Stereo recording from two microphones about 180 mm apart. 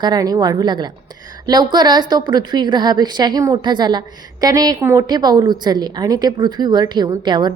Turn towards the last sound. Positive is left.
turn(degrees=-25)  # may be behind; listen again after turning